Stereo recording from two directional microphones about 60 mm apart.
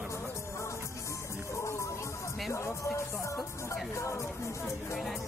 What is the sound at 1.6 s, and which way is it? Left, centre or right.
Music, left.